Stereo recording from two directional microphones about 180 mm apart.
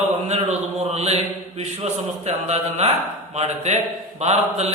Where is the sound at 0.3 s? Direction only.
40° right (ahead or behind).